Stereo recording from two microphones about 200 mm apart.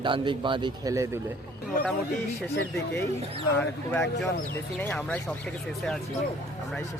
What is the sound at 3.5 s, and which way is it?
Speech, 10° left (ahead or behind).